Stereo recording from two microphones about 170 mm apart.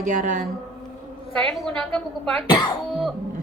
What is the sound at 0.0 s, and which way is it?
Speech, 50° right (ahead or behind).